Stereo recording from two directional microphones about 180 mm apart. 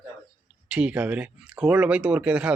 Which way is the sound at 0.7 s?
5° right (ahead or behind).